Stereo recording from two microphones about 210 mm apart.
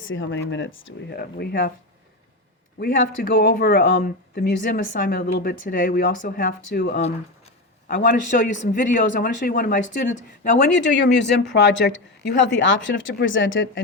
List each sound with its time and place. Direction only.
0.0 s speech: 65° left (ahead or behind)
1.1 s a woman's voice: 45° left (ahead or behind)
3.3 s a woman's voice: 45° left (ahead or behind)
10.7 s speech: 55° left (ahead or behind)